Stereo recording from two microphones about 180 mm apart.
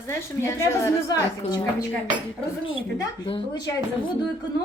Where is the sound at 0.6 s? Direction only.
15° left (ahead or behind).